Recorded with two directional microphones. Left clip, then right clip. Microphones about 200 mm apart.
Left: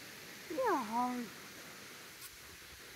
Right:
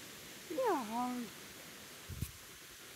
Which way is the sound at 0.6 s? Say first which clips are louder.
Left 1 dB; 20° left (ahead or behind).